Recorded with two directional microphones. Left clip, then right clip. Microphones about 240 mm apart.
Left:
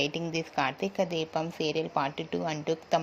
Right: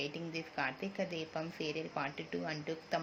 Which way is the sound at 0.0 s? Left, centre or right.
Left.